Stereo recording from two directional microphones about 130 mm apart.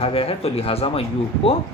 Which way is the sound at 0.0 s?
50° left (ahead or behind).